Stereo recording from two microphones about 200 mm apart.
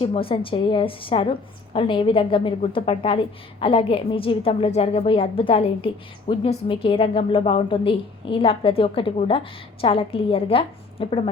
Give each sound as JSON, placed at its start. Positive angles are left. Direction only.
{"t": 0.0, "sound": "a woman's voice", "side_deg": 25}